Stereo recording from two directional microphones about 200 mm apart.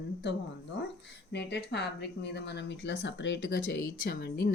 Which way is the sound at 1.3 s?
55° left (ahead or behind).